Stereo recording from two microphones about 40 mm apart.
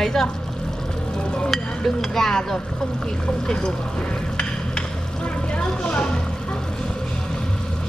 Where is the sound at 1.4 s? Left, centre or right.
Centre.